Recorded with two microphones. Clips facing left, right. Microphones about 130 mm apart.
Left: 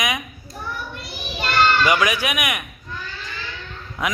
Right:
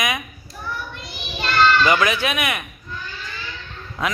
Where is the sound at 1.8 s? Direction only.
15° left (ahead or behind).